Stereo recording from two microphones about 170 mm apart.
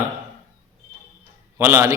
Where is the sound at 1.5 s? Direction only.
15° right (ahead or behind).